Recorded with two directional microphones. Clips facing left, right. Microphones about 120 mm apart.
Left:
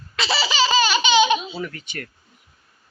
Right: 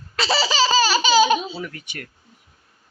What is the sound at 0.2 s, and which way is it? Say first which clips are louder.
Laughter: right 2 dB; 35° right (ahead or behind).